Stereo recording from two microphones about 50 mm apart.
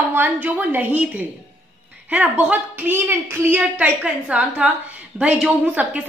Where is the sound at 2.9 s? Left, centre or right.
Right.